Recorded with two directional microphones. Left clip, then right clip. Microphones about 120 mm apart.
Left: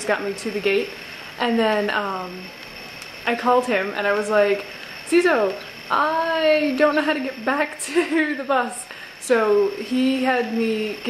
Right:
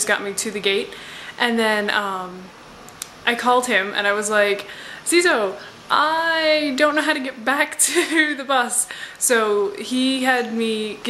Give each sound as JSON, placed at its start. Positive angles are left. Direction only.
{"t": 0.0, "sound": "a woman's voice", "side_deg": -25}
{"t": 1.4, "sound": "a woman's voice", "side_deg": -30}
{"t": 3.3, "sound": "a woman's voice", "side_deg": -25}